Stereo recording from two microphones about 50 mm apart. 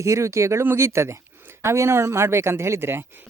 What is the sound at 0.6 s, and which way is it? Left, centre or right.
Speech, right.